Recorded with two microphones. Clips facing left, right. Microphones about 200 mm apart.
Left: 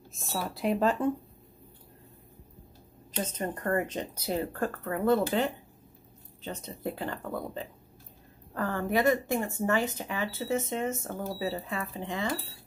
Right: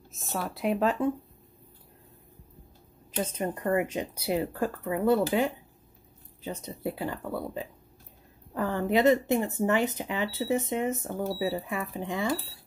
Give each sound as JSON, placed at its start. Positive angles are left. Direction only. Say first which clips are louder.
{"t": 0.1, "sound": "speech", "louder": "right 1 dB", "side_deg": 0}
{"t": 3.3, "sound": "speech", "louder": "right 2 dB", "side_deg": -10}